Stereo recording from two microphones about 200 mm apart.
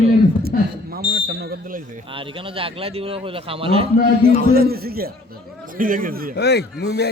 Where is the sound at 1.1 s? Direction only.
50° right (ahead or behind).